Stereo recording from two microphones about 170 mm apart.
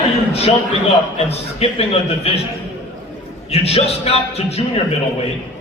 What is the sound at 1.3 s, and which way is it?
A man's voice, 35° left (ahead or behind).